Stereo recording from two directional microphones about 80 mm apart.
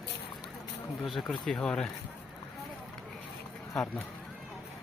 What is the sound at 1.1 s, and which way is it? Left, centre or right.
Speech, centre.